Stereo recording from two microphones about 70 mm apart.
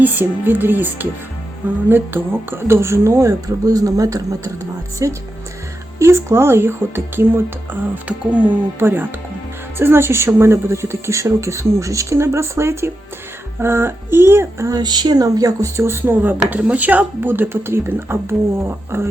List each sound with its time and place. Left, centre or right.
0.0 s a woman's voice: right
8.0 s speech: right
8.8 s a woman's voice: right
14.8 s a woman's voice: right